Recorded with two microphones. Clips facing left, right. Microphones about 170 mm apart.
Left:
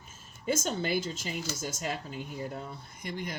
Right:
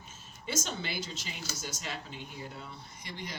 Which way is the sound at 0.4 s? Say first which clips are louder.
Left 6 dB; 45° left (ahead or behind).